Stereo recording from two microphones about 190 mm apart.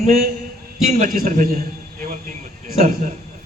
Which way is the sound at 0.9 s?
50° right (ahead or behind).